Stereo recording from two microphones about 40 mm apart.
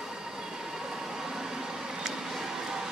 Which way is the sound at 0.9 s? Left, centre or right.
Centre.